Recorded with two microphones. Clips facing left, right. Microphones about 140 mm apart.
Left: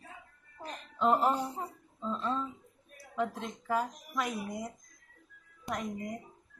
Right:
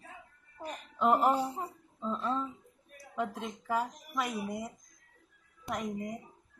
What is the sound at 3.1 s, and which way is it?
Speech, 5° right (ahead or behind).